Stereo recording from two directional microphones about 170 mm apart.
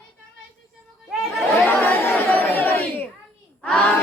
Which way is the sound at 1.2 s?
10° left (ahead or behind).